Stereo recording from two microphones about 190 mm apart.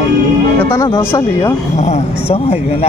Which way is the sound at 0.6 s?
15° left (ahead or behind).